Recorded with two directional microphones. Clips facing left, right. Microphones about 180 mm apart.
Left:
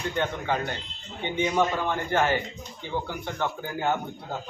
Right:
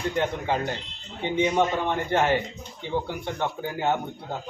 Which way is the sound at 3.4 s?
25° right (ahead or behind).